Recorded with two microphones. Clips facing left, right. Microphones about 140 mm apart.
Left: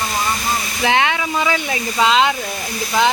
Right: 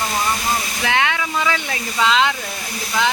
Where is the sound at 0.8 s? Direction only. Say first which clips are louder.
Left 4 dB; 20° left (ahead or behind).